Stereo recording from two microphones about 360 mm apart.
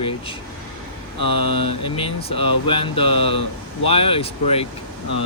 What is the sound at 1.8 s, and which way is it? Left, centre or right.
Speech, centre.